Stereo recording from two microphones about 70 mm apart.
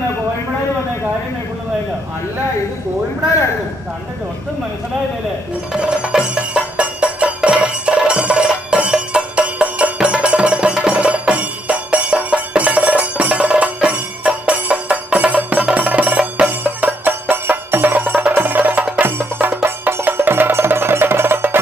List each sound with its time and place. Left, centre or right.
5.7 s music: centre; by 21.5 s right